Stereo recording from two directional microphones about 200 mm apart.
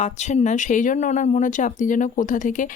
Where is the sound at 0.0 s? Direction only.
35° left (ahead or behind).